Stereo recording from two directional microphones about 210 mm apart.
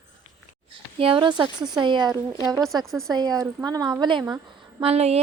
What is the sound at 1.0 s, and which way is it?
Speech, 25° right (ahead or behind).